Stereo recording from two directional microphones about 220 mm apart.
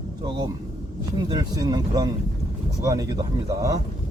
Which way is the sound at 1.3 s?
20° right (ahead or behind).